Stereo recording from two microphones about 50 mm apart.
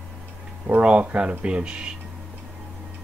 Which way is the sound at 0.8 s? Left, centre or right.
Right.